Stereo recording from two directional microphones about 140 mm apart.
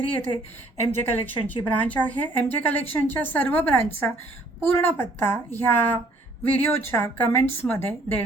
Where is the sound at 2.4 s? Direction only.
15° left (ahead or behind).